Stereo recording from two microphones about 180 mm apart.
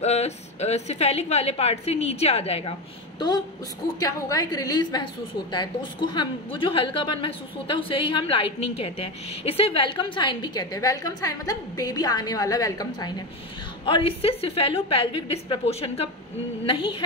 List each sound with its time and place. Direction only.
0.0 s a woman's voice: 35° left (ahead or behind)
4.0 s a woman's voice: 20° left (ahead or behind)